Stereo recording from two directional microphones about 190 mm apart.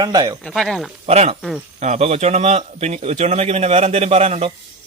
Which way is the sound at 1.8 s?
35° right (ahead or behind).